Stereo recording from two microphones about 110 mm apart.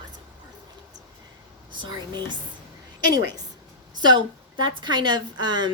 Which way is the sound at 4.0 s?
45° right (ahead or behind).